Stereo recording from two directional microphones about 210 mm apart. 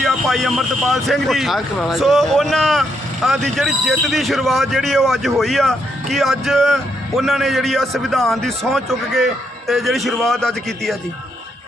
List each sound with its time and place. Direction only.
0.0 s a man's voice: centre (ahead or behind)